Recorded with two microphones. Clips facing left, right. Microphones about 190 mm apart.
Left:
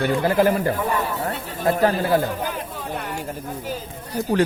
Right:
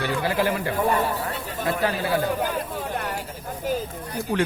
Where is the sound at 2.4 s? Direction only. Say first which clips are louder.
Right 2 dB; 50° right (ahead or behind).